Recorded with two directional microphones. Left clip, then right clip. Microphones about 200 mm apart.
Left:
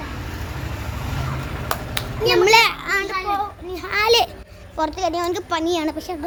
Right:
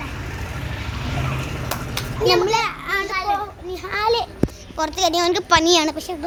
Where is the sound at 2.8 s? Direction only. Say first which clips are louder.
Left 1 dB; 5° left (ahead or behind).